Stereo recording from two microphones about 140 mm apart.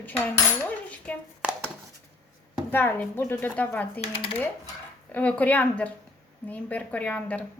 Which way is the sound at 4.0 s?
40° left (ahead or behind).